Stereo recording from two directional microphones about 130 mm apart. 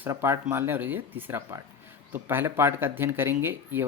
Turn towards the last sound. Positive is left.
turn(degrees=-15)  # may be behind; listen again after turning